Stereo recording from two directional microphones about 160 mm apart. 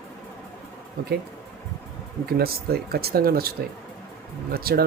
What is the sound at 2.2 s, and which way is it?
Speech, 75° right (ahead or behind).